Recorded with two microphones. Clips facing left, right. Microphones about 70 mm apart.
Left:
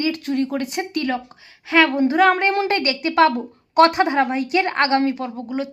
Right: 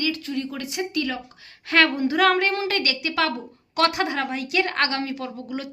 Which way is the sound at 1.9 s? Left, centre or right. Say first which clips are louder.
Left 4 dB; left.